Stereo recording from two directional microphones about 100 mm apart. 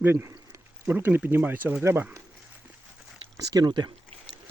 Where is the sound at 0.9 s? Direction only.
20° right (ahead or behind).